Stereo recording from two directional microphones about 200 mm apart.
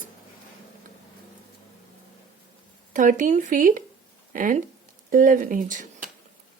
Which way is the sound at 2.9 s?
40° right (ahead or behind).